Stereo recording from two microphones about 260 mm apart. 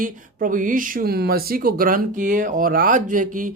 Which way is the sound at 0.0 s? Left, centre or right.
Right.